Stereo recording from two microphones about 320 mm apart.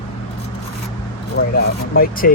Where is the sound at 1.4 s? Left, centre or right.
Left.